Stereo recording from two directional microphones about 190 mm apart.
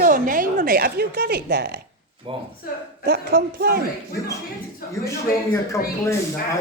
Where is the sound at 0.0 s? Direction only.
45° right (ahead or behind).